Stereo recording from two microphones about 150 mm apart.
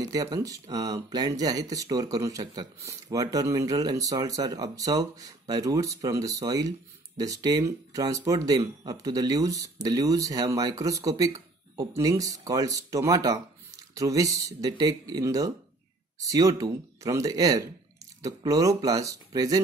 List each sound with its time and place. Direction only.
0.0 s speech: 25° right (ahead or behind)